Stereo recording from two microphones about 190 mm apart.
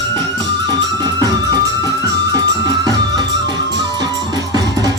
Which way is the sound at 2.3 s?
20° right (ahead or behind).